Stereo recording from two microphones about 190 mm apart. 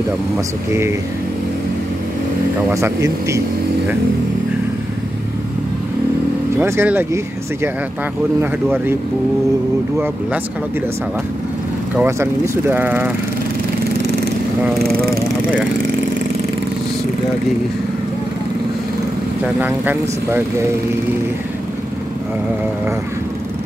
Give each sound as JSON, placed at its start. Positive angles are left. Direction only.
{"t": 2.7, "sound": "speech", "side_deg": -15}
{"t": 6.6, "sound": "speech", "side_deg": -10}
{"t": 8.4, "sound": "speech", "side_deg": -10}
{"t": 12.0, "sound": "speech", "side_deg": -10}
{"t": 19.4, "sound": "speech", "side_deg": -10}